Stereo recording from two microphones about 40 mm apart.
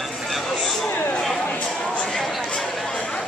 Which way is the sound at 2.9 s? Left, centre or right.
Left.